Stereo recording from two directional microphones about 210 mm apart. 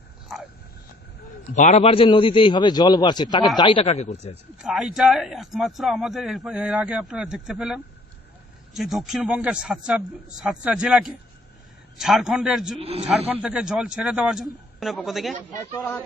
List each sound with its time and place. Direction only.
0.3 s dog: centre (ahead or behind)
1.5 s a man's voice: 35° left (ahead or behind)
4.5 s speech: 5° right (ahead or behind)
12.8 s a man's voice: 30° right (ahead or behind)
13.1 s speech: 5° right (ahead or behind)
15.7 s speech: 10° left (ahead or behind)